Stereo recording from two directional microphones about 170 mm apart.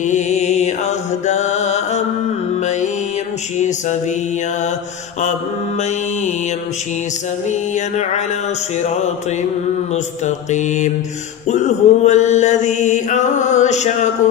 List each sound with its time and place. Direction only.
0.0 s mantra: 45° left (ahead or behind)
3.5 s mantra: 45° left (ahead or behind)
7.7 s mantra: 45° left (ahead or behind)
10.2 s mantra: 45° left (ahead or behind)